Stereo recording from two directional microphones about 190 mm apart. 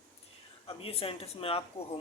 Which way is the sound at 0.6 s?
30° left (ahead or behind).